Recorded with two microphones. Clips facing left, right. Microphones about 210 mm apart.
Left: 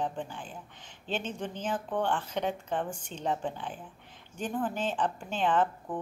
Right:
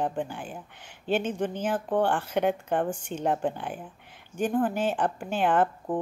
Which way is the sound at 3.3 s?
60° right (ahead or behind).